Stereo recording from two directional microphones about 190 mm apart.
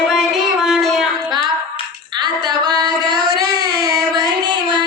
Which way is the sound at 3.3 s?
50° right (ahead or behind).